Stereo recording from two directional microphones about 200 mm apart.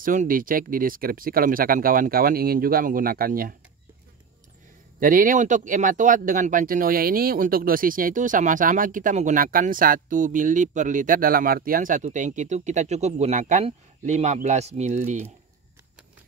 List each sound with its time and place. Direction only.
0.0 s speech: 40° right (ahead or behind)
5.0 s speech: 45° right (ahead or behind)